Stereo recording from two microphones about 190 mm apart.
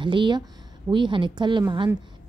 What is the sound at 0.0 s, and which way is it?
Speech, 25° right (ahead or behind).